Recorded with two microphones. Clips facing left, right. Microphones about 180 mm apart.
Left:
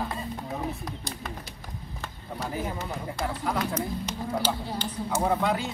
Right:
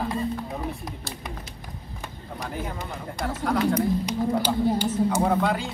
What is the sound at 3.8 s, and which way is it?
Speech, 10° right (ahead or behind).